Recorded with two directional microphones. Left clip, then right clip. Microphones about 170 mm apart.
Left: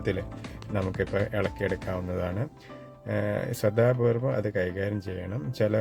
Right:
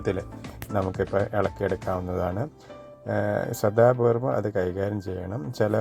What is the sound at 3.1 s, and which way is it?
Speech, 15° right (ahead or behind).